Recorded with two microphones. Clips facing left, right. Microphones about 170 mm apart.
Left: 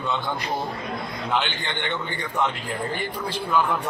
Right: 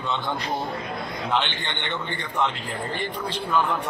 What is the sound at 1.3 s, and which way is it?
Speech, 5° left (ahead or behind).